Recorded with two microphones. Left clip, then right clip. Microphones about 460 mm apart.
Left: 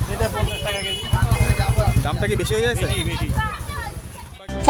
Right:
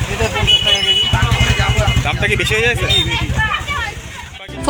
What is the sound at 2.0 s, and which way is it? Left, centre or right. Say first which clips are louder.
Vehicle: right 7 dB; left.